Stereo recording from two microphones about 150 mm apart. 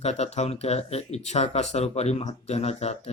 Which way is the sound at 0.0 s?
45° left (ahead or behind).